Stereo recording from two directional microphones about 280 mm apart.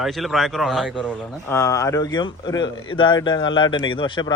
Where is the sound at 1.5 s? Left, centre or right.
Centre.